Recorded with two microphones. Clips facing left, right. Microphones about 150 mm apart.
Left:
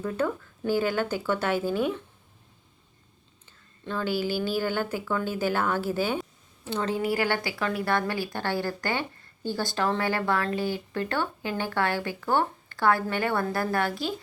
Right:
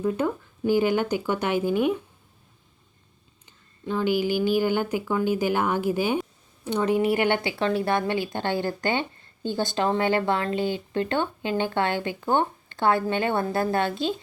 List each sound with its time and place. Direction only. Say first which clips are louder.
0.0 s a woman's voice: right 3 dB; 15° right (ahead or behind)
3.8 s a woman's voice: right 4 dB; 15° right (ahead or behind)